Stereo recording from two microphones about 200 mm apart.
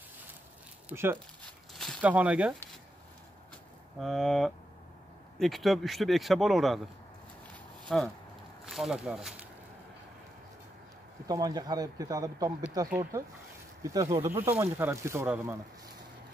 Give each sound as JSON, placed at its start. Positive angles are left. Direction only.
{"t": 0.8, "sound": "speech", "side_deg": -10}
{"t": 1.7, "sound": "speech", "side_deg": 0}
{"t": 4.0, "sound": "speech", "side_deg": 0}
{"t": 7.9, "sound": "speech", "side_deg": 0}
{"t": 11.2, "sound": "speech", "side_deg": -20}